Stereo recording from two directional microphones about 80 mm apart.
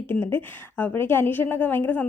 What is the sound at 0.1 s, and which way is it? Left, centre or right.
A woman's voice, left.